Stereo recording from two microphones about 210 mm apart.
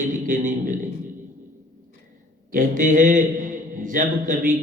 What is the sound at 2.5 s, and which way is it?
A man's voice, 40° right (ahead or behind).